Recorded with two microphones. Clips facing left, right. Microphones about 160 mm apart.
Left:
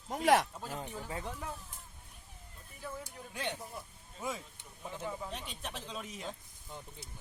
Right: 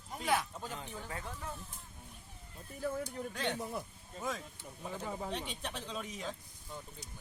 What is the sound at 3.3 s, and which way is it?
Speech, 10° left (ahead or behind).